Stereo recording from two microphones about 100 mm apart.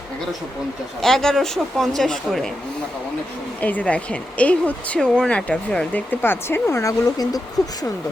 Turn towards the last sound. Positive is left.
turn(degrees=35)  # may be behind; listen again after turning